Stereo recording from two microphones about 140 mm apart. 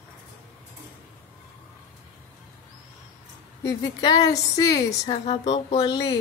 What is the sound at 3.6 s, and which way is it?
A woman's voice, 25° left (ahead or behind).